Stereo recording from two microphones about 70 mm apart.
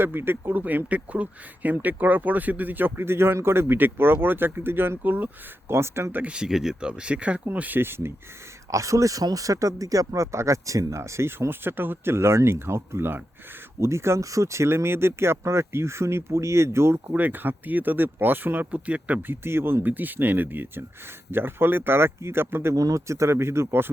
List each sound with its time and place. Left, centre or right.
0.0 s speech: right
6.1 s speech: right
6.3 s speech: centre; by 8.1 s right
8.7 s speech: right
17.2 s speech: right
19.4 s speech: right
22.7 s speech: right